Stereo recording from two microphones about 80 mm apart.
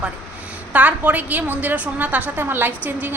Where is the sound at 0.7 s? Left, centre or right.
Centre.